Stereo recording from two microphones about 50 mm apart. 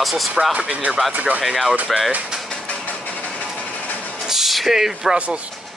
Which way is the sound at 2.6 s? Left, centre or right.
Left.